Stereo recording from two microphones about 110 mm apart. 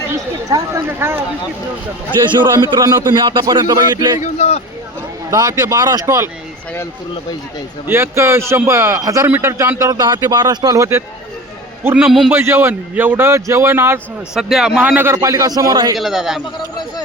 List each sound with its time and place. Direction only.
0.1 s a man's voice: 30° right (ahead or behind)
2.6 s speech: 40° right (ahead or behind)
3.6 s a man's voice: 35° right (ahead or behind)
4.4 s speech: 85° left
5.3 s a man's voice: 30° right (ahead or behind)
7.9 s a man's voice: 20° right (ahead or behind)
11.9 s a man's voice: 5° right (ahead or behind)
12.3 s a man's voice: 20° right (ahead or behind)
14.3 s a man's voice: 5° right (ahead or behind)
14.9 s a man's voice: 25° right (ahead or behind); by 16.0 s 40° right (ahead or behind)
16.0 s a man's voice: centre (ahead or behind)